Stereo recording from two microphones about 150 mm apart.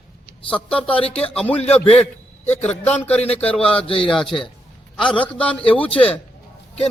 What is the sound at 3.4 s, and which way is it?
Speech, 10° left (ahead or behind).